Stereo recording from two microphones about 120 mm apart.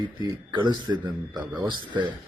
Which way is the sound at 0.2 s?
40° right (ahead or behind).